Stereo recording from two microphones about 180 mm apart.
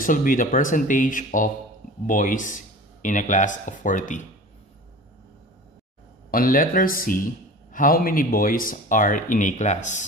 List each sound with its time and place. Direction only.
0.0 s speech: 50° left (ahead or behind)
6.3 s speech: 50° left (ahead or behind)